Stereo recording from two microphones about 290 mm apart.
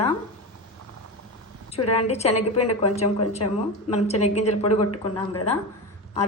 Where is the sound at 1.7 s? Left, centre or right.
Left.